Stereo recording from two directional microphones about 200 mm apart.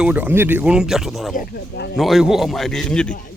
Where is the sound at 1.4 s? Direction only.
55° left (ahead or behind).